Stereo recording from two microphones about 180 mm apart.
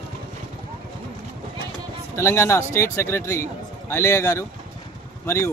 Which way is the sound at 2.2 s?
15° left (ahead or behind).